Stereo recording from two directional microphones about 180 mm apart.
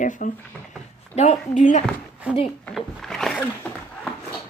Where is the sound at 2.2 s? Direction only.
5° right (ahead or behind).